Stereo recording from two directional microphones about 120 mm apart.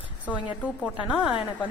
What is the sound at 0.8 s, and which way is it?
Speech, 5° right (ahead or behind).